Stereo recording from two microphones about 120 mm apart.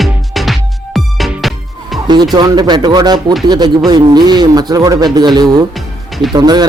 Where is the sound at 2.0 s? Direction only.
35° right (ahead or behind).